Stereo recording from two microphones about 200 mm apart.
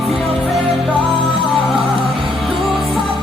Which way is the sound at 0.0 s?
Centre (ahead or behind).